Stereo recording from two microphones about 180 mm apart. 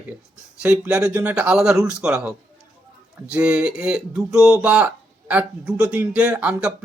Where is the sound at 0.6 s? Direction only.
5° right (ahead or behind).